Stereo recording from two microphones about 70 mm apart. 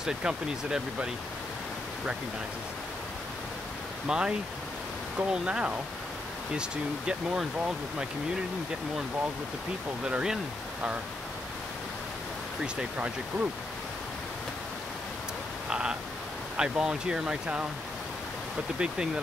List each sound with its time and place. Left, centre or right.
0.0 s speech: centre
4.1 s speech: centre
10.0 s speech: centre
12.9 s speech: centre
15.7 s a sound: centre
16.5 s speech: centre
18.8 s speech: centre